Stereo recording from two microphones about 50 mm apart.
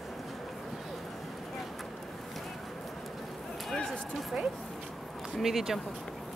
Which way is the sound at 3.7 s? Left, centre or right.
Centre.